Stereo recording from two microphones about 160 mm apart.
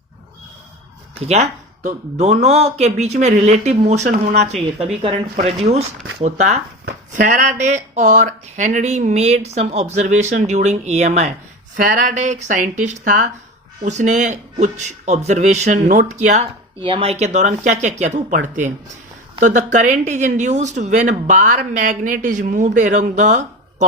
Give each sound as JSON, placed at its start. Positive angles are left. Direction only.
{"t": 1.2, "sound": "speech", "side_deg": -45}
{"t": 11.8, "sound": "speech", "side_deg": -60}
{"t": 16.8, "sound": "speech", "side_deg": -35}